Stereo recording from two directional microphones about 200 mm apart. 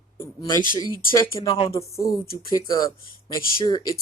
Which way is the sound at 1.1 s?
15° left (ahead or behind).